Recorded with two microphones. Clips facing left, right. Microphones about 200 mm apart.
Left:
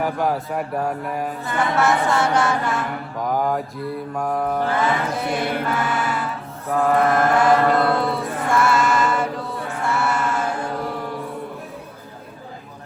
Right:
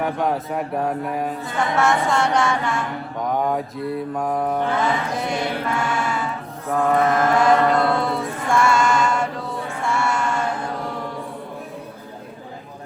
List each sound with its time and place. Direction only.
0.0 s mantra: centre (ahead or behind)
7.3 s chant: centre (ahead or behind)